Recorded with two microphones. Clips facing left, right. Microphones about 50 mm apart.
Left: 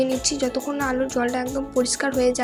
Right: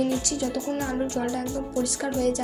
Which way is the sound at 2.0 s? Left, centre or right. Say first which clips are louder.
Left 4 dB; left.